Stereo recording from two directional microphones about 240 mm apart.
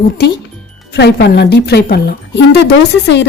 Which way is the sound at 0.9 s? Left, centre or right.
Left.